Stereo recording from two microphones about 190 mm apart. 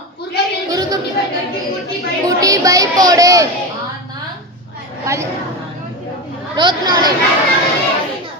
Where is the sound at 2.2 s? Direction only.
20° right (ahead or behind).